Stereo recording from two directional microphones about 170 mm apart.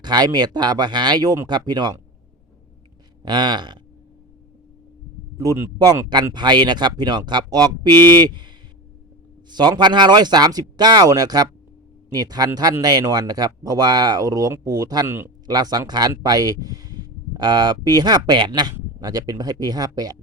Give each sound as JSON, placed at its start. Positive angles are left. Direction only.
{"t": 0.0, "sound": "speech", "side_deg": -25}
{"t": 3.2, "sound": "speech", "side_deg": -25}
{"t": 5.4, "sound": "speech", "side_deg": -20}